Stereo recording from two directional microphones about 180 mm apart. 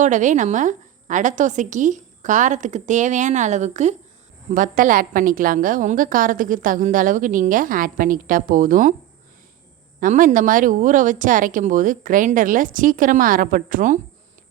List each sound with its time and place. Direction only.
0.0 s a woman's voice: 45° right (ahead or behind)
10.0 s a woman's voice: 50° right (ahead or behind)